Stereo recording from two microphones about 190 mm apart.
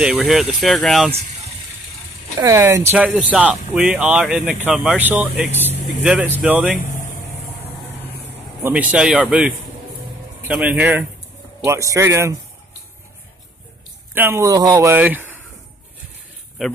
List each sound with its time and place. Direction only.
0.0 s speech: 5° right (ahead or behind)
2.4 s speech: 15° right (ahead or behind)
8.6 s speech: 5° right (ahead or behind)
10.5 s speech: 10° right (ahead or behind)
14.1 s speech: 15° right (ahead or behind)
16.6 s speech: centre (ahead or behind)